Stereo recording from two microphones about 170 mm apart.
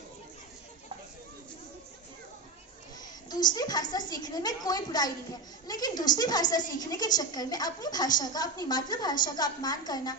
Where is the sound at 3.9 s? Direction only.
25° left (ahead or behind).